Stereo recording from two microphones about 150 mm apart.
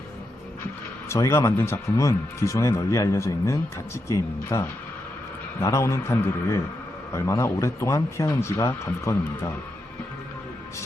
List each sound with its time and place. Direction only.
1.1 s speech: 20° left (ahead or behind)
5.6 s speech: 20° left (ahead or behind)